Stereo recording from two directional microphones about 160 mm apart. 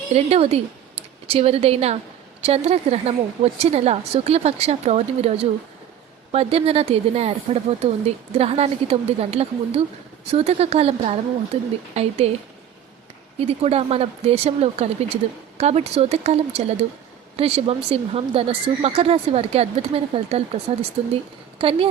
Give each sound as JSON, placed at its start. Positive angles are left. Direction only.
{"t": 0.1, "sound": "speech", "side_deg": -40}
{"t": 13.4, "sound": "speech", "side_deg": -40}